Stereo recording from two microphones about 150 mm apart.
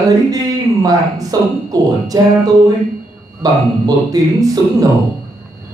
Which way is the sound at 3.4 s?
25° right (ahead or behind).